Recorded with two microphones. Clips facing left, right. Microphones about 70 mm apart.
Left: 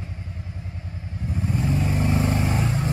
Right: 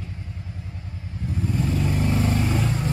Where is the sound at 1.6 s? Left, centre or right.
Left.